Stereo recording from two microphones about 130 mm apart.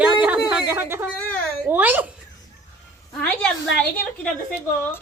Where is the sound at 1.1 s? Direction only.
10° left (ahead or behind).